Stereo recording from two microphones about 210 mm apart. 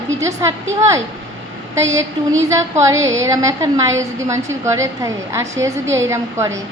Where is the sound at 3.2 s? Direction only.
15° right (ahead or behind).